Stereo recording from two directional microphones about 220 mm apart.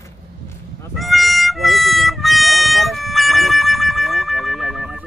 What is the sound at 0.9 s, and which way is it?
Music, centre (ahead or behind).